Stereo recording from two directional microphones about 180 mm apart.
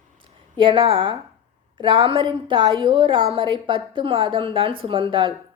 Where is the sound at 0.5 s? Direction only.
25° right (ahead or behind).